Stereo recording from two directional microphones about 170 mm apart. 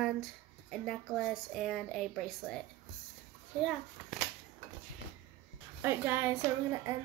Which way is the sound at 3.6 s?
Centre (ahead or behind).